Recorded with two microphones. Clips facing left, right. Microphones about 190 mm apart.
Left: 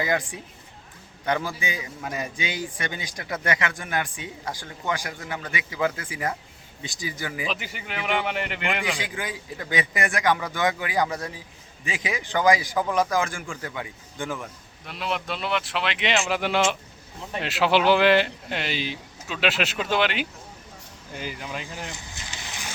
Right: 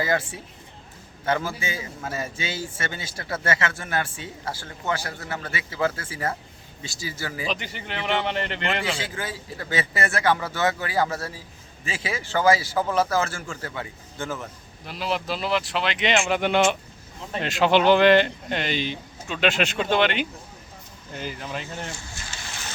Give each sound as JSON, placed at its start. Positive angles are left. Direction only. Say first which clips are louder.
{"t": 0.0, "sound": "a man's voice", "louder": "right 1 dB", "side_deg": 15}
{"t": 1.5, "sound": "a man's voice", "louder": "even", "side_deg": 15}
{"t": 7.4, "sound": "a man's voice", "louder": "right 1 dB", "side_deg": 5}
{"t": 14.8, "sound": "a man's voice", "louder": "right 2 dB", "side_deg": 0}
{"t": 21.8, "sound": "vehicle", "louder": "right 1 dB", "side_deg": 20}